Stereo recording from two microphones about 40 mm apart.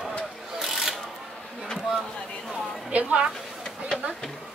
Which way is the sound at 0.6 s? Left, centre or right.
Centre.